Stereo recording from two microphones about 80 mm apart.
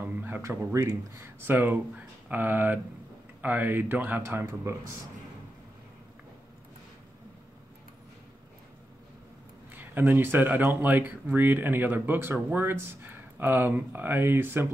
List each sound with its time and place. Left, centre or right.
0.0 s a sound: right
0.7 s speech: right
4.2 s speech: right
9.8 s speech: right